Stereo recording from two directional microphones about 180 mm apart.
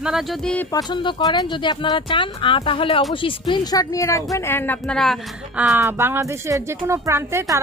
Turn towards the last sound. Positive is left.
turn(degrees=-15)  # may be behind; listen again after turning